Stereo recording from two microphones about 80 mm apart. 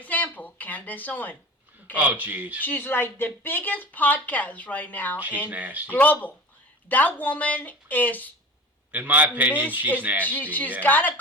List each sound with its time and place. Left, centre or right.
0.0 s a sound: left
2.0 s a man's voice: right
2.6 s speech: left
5.5 s a man's voice: centre
5.9 s speech: left
8.9 s a man's voice: right
10.2 s speech: left